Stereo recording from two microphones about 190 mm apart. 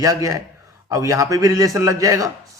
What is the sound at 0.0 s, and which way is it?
A man's voice, 15° right (ahead or behind).